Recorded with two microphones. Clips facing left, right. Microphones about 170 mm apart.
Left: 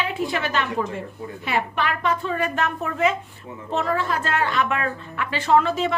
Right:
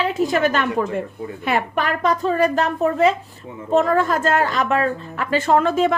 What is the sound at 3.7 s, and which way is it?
A woman's voice, 45° right (ahead or behind).